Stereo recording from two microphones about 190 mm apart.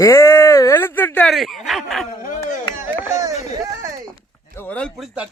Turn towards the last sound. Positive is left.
turn(degrees=5)  # may be behind; listen again after turning